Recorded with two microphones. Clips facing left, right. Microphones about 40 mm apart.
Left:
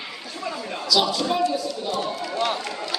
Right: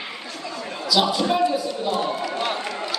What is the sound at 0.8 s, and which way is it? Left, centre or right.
Run, centre.